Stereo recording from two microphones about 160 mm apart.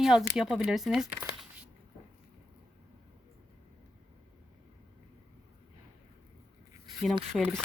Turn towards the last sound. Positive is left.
turn(degrees=5)  # may be behind; listen again after turning